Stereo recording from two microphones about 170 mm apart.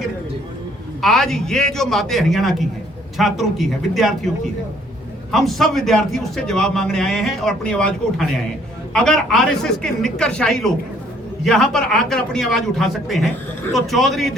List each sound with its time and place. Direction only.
1.0 s a man's voice: centre (ahead or behind)
5.3 s a man's voice: centre (ahead or behind)